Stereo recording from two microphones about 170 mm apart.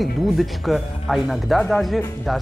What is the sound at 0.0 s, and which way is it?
Speech, centre (ahead or behind).